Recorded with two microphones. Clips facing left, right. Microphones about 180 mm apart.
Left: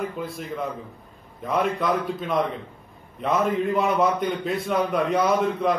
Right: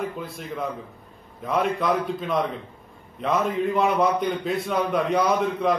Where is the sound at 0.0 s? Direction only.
Centre (ahead or behind).